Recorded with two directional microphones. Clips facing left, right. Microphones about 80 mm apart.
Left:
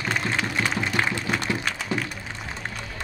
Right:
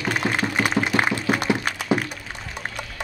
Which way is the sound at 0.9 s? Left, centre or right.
Centre.